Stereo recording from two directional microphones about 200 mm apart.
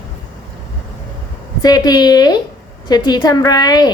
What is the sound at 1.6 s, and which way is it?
A woman's voice, 20° left (ahead or behind).